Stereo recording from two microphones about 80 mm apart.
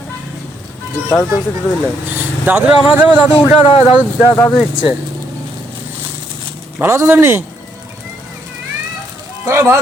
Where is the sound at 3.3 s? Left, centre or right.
Left.